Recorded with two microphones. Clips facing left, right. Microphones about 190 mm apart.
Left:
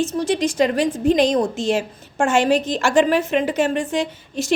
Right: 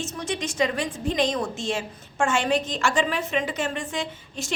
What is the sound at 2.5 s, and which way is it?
Speech, 50° left (ahead or behind).